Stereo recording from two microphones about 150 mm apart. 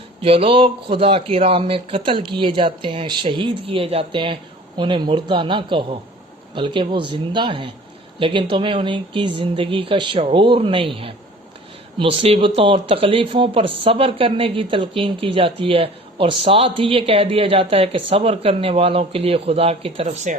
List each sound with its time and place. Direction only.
0.2 s speech: 40° right (ahead or behind)